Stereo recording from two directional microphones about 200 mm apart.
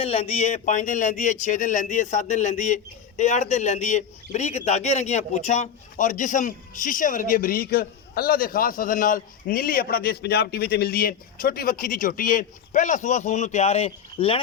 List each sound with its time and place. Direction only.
0.0 s speech: 30° left (ahead or behind)